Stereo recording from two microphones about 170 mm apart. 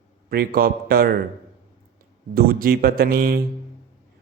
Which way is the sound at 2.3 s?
65° right (ahead or behind).